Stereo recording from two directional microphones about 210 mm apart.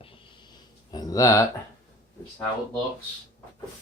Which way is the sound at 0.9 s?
15° left (ahead or behind).